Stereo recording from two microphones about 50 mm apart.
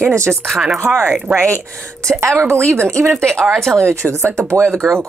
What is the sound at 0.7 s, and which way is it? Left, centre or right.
Speech, right.